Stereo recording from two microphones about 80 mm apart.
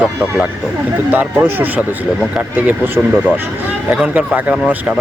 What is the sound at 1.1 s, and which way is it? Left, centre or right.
Speech, right.